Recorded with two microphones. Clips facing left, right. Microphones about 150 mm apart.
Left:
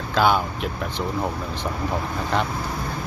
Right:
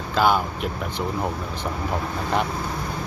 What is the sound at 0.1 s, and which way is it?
Speech, centre (ahead or behind).